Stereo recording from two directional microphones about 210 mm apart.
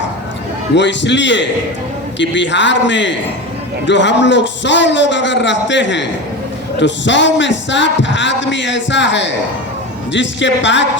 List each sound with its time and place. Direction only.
0.8 s speech: 60° left (ahead or behind)